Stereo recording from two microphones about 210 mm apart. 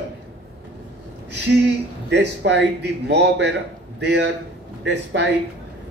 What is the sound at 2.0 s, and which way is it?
A man's voice, 55° right (ahead or behind).